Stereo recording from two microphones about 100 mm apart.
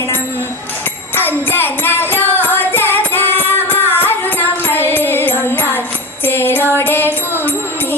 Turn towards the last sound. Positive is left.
turn(degrees=20)  # may be behind; listen again after turning